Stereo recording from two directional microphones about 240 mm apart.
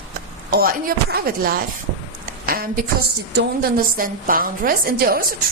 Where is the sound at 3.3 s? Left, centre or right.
Right.